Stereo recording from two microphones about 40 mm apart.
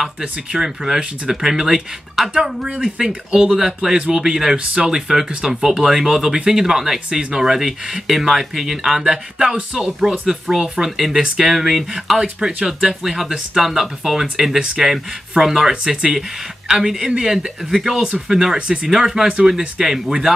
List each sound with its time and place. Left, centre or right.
0.0 s speech: centre
2.3 s speech: right; by 12.2 s centre
12.2 s speech: centre